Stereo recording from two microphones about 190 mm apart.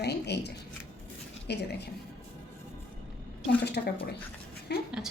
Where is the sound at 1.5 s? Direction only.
60° left (ahead or behind).